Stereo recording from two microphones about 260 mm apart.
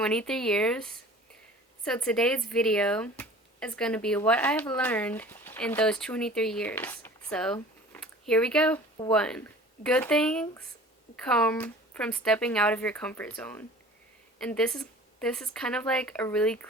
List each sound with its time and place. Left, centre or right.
0.0 s speech: centre